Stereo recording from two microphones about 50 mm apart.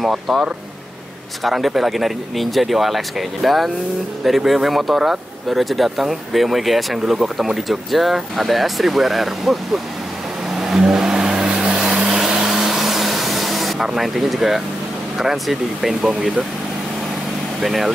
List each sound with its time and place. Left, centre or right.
0.3 s speech: centre
10.5 s vehicle: centre
15.1 s speech: centre
17.6 s speech: centre